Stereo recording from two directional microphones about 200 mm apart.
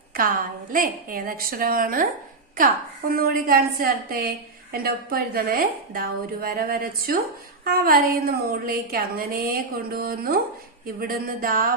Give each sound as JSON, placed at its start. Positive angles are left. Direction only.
{"t": 0.7, "sound": "a woman's voice", "side_deg": -45}
{"t": 3.1, "sound": "a woman's voice", "side_deg": -50}